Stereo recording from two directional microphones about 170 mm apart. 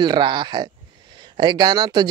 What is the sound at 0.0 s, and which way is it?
Speech, 25° right (ahead or behind).